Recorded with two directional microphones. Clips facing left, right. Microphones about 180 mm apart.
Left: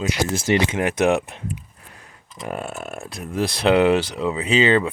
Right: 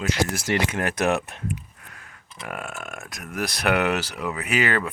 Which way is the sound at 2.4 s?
35° left (ahead or behind).